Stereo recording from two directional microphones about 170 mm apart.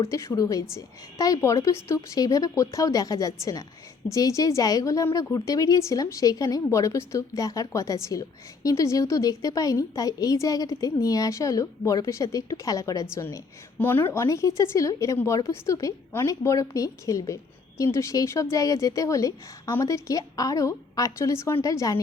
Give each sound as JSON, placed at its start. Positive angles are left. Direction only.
{"t": 0.1, "sound": "a woman's voice", "side_deg": 20}